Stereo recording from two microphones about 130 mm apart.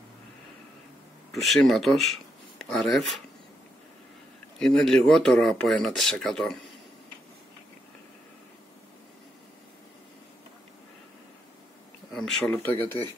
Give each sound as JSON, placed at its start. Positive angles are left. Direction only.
{"t": 1.3, "sound": "speech", "side_deg": 0}
{"t": 4.6, "sound": "speech", "side_deg": 5}
{"t": 12.1, "sound": "a sound", "side_deg": 0}
{"t": 12.4, "sound": "speech", "side_deg": 15}